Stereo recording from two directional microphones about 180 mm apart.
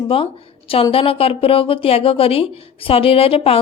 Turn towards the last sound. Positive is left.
turn(degrees=30)  # may be behind; listen again after turning